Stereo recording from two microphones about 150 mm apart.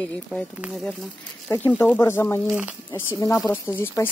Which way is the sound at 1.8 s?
15° left (ahead or behind).